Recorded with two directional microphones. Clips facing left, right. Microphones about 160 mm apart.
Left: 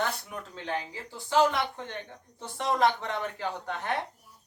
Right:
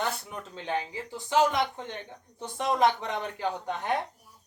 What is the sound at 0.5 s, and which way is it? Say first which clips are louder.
Speech: right 3 dB; 20° right (ahead or behind).